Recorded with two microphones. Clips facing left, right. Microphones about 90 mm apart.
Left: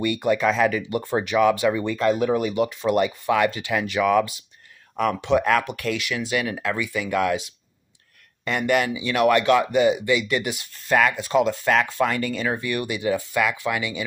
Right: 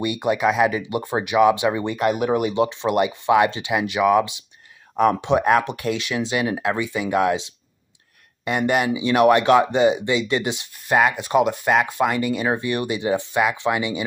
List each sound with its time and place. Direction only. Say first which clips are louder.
0.0 s speech: right 1 dB; 20° right (ahead or behind)